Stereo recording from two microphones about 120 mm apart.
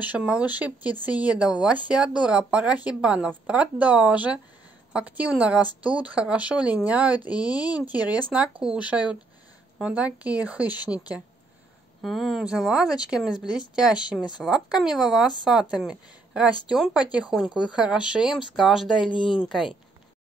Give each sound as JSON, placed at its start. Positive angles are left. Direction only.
{"t": 0.0, "sound": "speech", "side_deg": -10}
{"t": 12.0, "sound": "a woman's voice", "side_deg": 0}
{"t": 19.0, "sound": "speech", "side_deg": 45}